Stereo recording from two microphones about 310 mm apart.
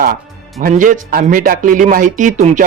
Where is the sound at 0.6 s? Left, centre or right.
Right.